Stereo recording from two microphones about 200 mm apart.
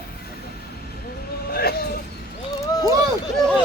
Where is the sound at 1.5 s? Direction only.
50° left (ahead or behind).